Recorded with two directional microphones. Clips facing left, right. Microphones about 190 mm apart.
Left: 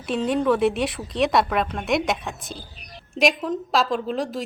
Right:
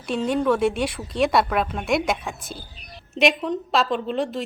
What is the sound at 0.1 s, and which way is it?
A woman's voice, centre (ahead or behind).